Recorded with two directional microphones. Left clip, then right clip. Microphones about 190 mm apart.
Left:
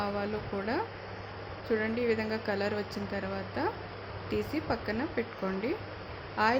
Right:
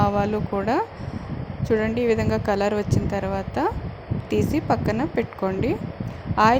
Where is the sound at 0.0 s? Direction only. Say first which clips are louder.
Right 11 dB; 35° right (ahead or behind).